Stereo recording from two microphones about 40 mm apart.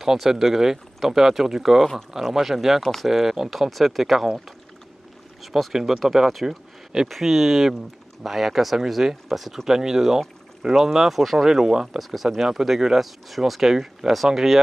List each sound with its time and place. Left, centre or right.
0.0 s speech: centre
2.8 s speech: centre
3.1 s speech: centre
5.4 s speech: centre
6.4 s a sound: centre
7.1 s speech: centre
12.0 s speech: centre